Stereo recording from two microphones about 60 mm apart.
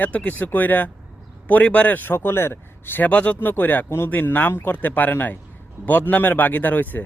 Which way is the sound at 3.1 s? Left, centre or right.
Left.